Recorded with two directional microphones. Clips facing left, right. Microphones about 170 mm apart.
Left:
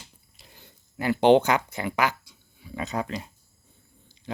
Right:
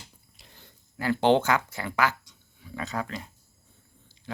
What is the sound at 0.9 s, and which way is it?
Speech, 20° left (ahead or behind).